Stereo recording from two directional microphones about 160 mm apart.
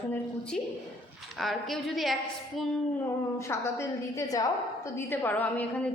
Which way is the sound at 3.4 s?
15° left (ahead or behind).